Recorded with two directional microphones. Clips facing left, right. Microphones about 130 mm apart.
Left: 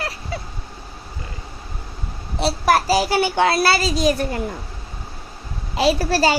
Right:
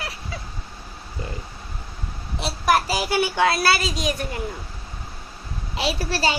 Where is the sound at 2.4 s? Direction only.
35° left (ahead or behind).